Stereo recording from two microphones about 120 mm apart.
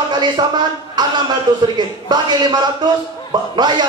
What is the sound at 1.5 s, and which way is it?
A man's voice, 35° right (ahead or behind).